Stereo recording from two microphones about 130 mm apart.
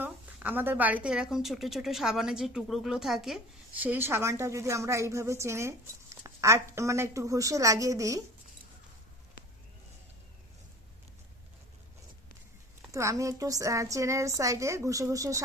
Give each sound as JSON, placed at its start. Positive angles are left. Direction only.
{"t": 0.0, "sound": "a woman's voice", "side_deg": -15}
{"t": 3.8, "sound": "speech", "side_deg": -15}
{"t": 12.9, "sound": "speech", "side_deg": -25}